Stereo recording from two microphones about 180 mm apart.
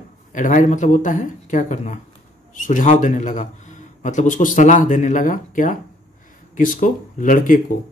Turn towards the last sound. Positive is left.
turn(degrees=50)  # may be behind; listen again after turning